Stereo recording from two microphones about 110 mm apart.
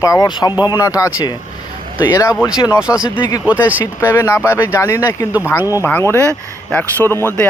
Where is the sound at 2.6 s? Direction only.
35° left (ahead or behind).